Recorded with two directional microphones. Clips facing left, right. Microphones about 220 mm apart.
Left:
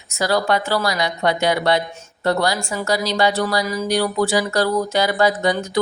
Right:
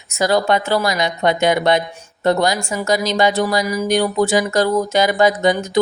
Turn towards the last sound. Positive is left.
turn(degrees=-20)  # may be behind; listen again after turning